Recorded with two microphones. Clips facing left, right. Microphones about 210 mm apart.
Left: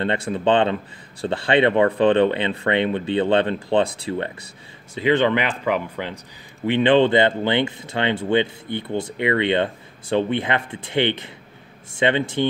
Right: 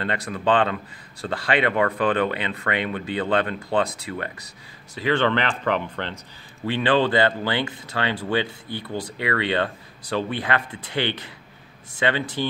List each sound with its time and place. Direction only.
0.0 s speech: 25° left (ahead or behind); by 6.1 s 10° left (ahead or behind)
6.6 s speech: 20° left (ahead or behind)